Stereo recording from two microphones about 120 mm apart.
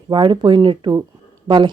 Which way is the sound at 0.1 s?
40° right (ahead or behind).